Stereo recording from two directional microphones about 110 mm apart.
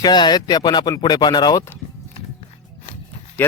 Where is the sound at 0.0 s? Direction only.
40° left (ahead or behind).